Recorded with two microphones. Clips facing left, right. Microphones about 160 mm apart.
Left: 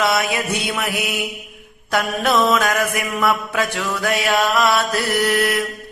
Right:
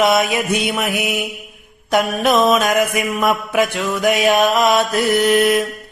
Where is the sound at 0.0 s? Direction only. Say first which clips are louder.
Right 4 dB; 20° right (ahead or behind).